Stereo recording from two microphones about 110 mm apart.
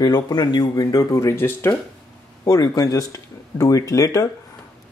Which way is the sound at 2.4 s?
30° left (ahead or behind).